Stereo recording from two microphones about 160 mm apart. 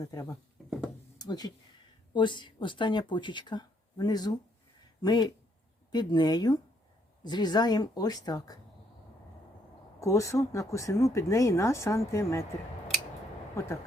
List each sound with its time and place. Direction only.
0.0 s speech: 20° left (ahead or behind)
10.0 s speech: 20° left (ahead or behind)